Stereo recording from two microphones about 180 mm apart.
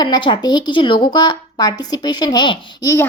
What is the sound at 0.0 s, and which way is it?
A woman's voice, 25° left (ahead or behind).